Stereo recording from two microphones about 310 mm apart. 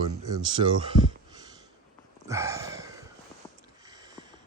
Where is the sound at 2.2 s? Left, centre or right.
Centre.